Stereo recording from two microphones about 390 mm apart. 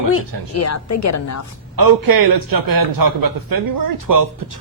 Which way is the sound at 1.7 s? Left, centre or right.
Right.